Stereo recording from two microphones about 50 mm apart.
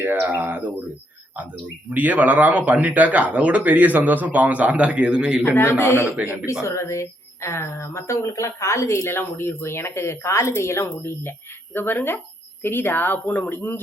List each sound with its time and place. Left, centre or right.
0.0 s speech: right
1.9 s speech: right; by 5.5 s centre
5.5 s speech: left
6.2 s speech: left
9.0 s speech: left